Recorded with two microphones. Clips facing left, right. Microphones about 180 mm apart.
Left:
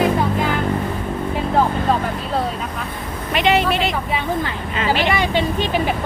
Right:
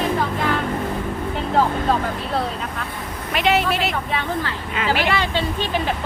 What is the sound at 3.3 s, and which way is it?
Speech, centre (ahead or behind).